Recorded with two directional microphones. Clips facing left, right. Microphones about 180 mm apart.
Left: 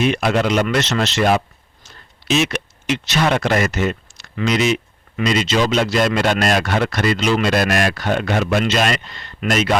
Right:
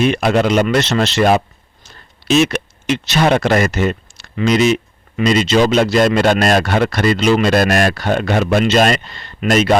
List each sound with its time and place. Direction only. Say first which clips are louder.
0.0 s speech: right 3 dB; 40° right (ahead or behind)
2.4 s speech: right 5 dB; 40° right (ahead or behind)